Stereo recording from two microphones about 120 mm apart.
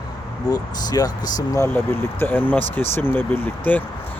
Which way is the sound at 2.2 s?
15° left (ahead or behind).